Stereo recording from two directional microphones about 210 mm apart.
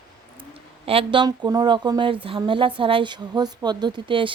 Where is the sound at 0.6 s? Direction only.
25° right (ahead or behind).